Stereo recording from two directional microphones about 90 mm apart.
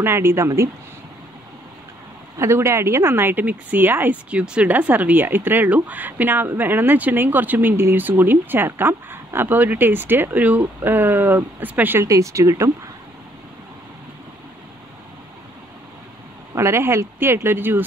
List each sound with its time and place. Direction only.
0.0 s speech: 25° right (ahead or behind)
2.3 s speech: 30° right (ahead or behind)
12.0 s speech: 35° right (ahead or behind)
16.5 s speech: 30° right (ahead or behind)